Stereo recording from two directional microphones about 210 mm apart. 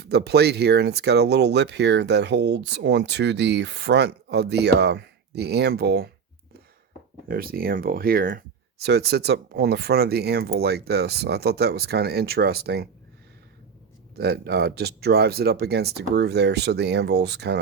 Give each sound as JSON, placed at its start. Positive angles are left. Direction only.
{"t": 0.0, "sound": "speech", "side_deg": -50}
{"t": 7.3, "sound": "speech", "side_deg": -45}
{"t": 14.2, "sound": "speech", "side_deg": -50}